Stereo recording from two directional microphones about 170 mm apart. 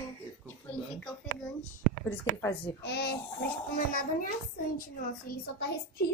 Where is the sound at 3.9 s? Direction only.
55° left (ahead or behind).